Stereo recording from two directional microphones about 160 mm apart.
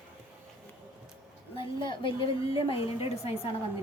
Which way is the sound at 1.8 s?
30° left (ahead or behind).